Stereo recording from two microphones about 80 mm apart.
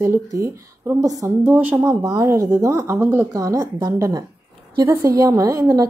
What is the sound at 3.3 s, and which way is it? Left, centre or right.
Speech, right.